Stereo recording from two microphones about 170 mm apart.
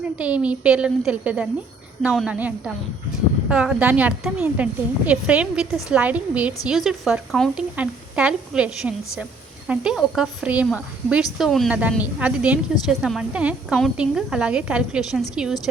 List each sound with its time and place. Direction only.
0.2 s a woman's voice: 5° right (ahead or behind)